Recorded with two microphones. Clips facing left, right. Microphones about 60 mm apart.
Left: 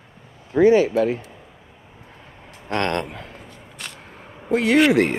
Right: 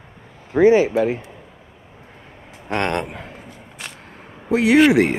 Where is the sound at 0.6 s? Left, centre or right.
Right.